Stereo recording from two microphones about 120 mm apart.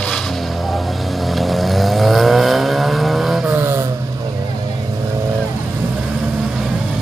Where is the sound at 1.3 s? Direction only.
Centre (ahead or behind).